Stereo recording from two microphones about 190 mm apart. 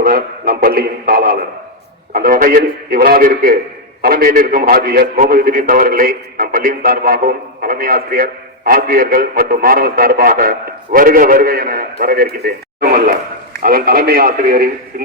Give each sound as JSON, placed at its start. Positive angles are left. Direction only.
{"t": 0.0, "sound": "a man's voice", "side_deg": -50}